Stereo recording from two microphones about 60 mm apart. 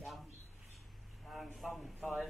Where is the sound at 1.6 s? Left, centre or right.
Centre.